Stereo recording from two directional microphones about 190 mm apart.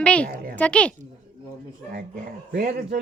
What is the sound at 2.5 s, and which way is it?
Speech, 50° right (ahead or behind).